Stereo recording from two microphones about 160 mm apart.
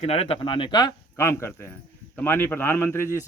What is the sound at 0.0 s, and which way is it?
Speech, 40° left (ahead or behind).